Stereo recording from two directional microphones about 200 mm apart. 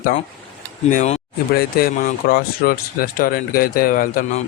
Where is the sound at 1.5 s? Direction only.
50° left (ahead or behind).